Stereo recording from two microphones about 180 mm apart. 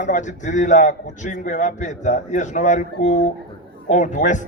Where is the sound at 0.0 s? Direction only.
40° left (ahead or behind).